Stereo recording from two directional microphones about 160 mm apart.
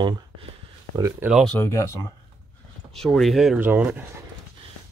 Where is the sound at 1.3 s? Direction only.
5° left (ahead or behind).